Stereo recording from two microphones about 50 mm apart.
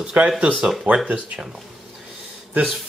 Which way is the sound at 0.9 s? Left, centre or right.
Right.